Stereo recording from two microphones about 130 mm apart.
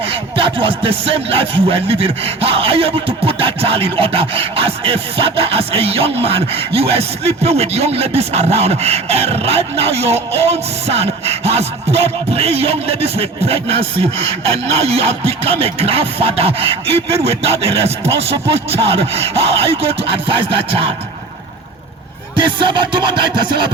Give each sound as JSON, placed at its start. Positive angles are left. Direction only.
{"t": 0.0, "sound": "music", "side_deg": -45}
{"t": 22.4, "sound": "music", "side_deg": -40}